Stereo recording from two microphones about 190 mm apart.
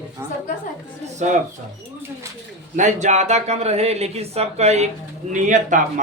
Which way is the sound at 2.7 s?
40° right (ahead or behind).